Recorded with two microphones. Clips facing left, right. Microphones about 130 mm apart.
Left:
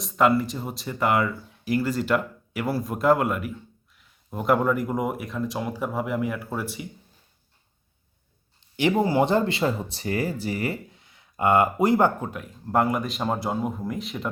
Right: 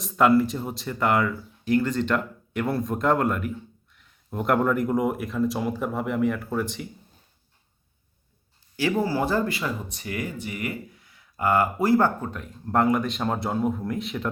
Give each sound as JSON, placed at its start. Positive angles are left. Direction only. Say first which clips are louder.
{"t": 0.0, "sound": "speech", "louder": "right 2 dB", "side_deg": 0}
{"t": 8.7, "sound": "speech", "louder": "left 3 dB", "side_deg": 20}